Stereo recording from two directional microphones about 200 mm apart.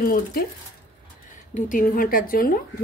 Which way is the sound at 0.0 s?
50° left (ahead or behind).